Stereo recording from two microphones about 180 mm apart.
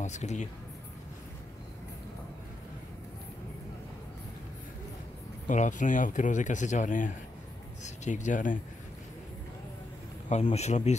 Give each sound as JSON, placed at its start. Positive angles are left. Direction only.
{"t": 0.0, "sound": "speech", "side_deg": 40}
{"t": 5.5, "sound": "speech", "side_deg": 45}
{"t": 10.3, "sound": "speech", "side_deg": 40}